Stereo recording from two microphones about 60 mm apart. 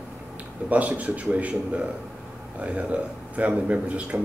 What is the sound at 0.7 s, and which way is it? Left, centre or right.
A man's voice, right.